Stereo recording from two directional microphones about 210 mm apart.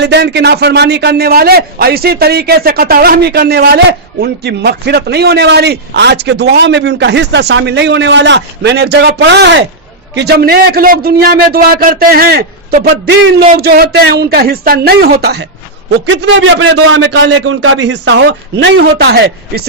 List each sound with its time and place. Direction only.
0.0 s a man's voice: 55° right (ahead or behind)